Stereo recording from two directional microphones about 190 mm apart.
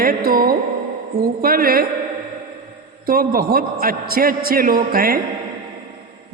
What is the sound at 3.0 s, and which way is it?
A man's voice, 50° right (ahead or behind).